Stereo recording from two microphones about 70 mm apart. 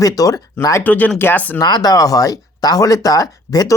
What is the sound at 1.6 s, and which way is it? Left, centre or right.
Speech, left.